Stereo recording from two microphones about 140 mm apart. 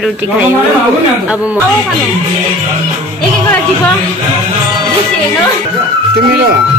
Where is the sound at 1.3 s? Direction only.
10° right (ahead or behind).